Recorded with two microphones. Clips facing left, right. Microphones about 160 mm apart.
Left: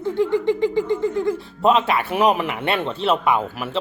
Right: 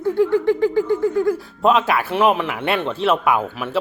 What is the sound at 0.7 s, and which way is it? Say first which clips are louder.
A man's voice: right 3 dB; 5° right (ahead or behind).